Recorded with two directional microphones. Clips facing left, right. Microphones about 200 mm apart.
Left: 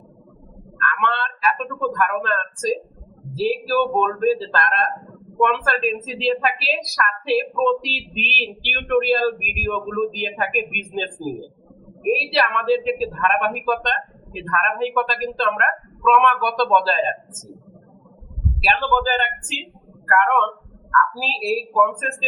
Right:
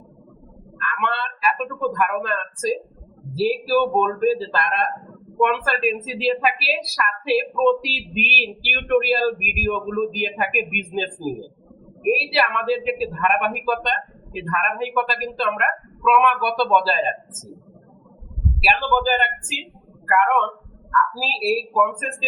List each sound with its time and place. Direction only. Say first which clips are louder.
0.8 s a woman's voice: left 2 dB; 5° right (ahead or behind)
18.6 s a woman's voice: even; 5° right (ahead or behind)
20.9 s a woman's voice: left 1 dB; 5° right (ahead or behind)